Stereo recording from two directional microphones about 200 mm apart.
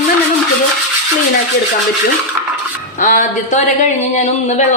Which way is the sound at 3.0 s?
40° left (ahead or behind).